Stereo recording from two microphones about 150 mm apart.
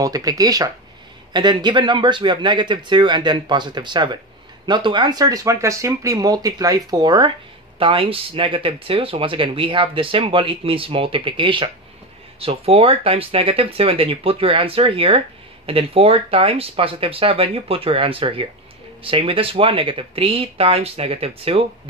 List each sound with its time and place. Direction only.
0.0 s speech: 25° right (ahead or behind); by 21.6 s 40° right (ahead or behind)